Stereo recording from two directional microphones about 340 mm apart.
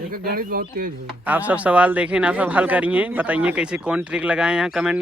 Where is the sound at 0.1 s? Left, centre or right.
Right.